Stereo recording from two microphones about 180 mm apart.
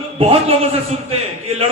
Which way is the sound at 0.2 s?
35° right (ahead or behind).